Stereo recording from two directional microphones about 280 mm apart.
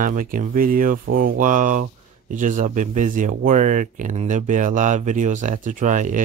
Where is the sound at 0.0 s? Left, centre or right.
Right.